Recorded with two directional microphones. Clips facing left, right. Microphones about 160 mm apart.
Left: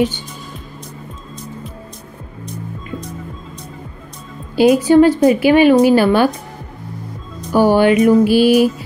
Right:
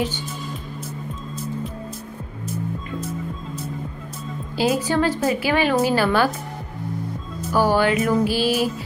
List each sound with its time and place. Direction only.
4.6 s a woman's voice: 15° left (ahead or behind)
7.5 s a woman's voice: 20° left (ahead or behind)